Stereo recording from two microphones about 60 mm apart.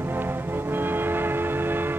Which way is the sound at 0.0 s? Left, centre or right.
Right.